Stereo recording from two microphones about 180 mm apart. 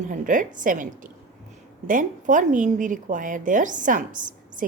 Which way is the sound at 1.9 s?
45° right (ahead or behind).